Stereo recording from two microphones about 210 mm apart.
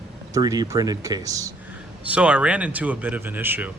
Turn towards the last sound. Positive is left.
turn(degrees=-10)  # may be behind; listen again after turning